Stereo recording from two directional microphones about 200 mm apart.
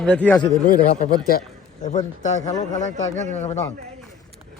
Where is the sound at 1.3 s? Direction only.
45° left (ahead or behind).